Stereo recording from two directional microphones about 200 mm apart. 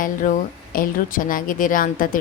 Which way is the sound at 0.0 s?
40° left (ahead or behind).